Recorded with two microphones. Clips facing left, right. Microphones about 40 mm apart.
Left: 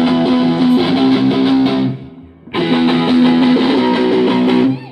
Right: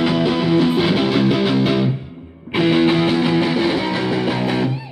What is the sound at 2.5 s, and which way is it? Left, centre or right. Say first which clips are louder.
Music: left 2 dB; centre.